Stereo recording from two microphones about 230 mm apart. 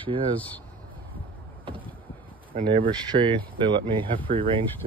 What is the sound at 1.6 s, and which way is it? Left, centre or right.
Vehicle, right.